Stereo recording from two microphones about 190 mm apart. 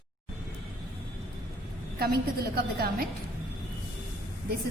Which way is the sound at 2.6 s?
50° right (ahead or behind).